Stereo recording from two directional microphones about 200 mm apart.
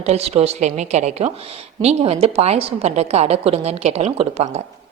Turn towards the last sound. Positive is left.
turn(degrees=-30)  # may be behind; listen again after turning